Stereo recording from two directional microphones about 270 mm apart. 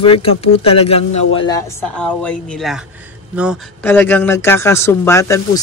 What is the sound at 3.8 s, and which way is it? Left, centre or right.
Speech, centre.